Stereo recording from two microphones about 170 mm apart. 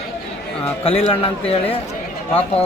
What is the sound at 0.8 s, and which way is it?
Speech, 35° left (ahead or behind).